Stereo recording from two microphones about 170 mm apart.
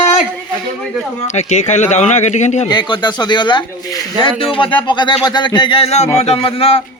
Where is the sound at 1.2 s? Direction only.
40° left (ahead or behind).